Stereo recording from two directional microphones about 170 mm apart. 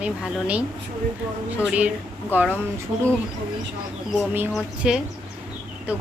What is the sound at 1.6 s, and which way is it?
Speech, 5° right (ahead or behind).